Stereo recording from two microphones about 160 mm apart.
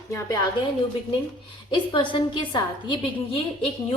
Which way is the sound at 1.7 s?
30° left (ahead or behind).